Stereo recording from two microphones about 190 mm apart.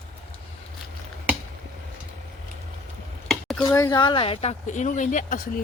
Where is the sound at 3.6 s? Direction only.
15° left (ahead or behind).